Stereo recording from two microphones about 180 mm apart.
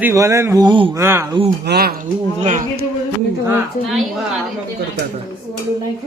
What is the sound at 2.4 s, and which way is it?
Speech, 40° right (ahead or behind).